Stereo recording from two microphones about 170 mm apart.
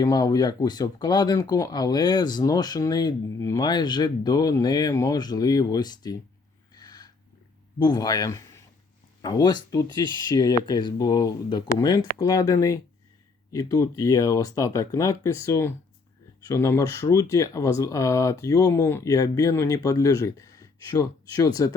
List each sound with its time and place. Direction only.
0.0 s speech: 20° left (ahead or behind)
6.7 s snort: 25° left (ahead or behind)
7.8 s speech: 25° left (ahead or behind)